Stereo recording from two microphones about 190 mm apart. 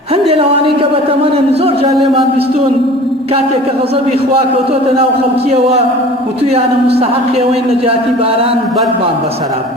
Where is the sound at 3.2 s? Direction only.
30° right (ahead or behind).